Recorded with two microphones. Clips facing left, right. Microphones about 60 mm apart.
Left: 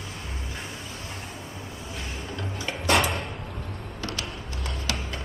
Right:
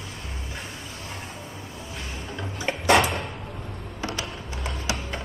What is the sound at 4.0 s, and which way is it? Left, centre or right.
Music, centre.